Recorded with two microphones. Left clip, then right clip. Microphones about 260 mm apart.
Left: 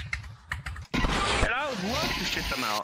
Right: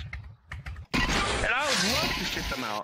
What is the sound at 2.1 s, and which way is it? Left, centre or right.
Speech, centre.